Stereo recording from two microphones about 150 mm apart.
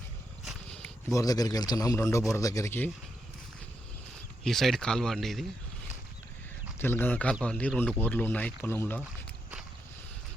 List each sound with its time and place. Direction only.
0.4 s wild animals: 5° left (ahead or behind)
1.1 s speech: 25° left (ahead or behind)
4.4 s speech: centre (ahead or behind)
6.7 s speech: 15° left (ahead or behind)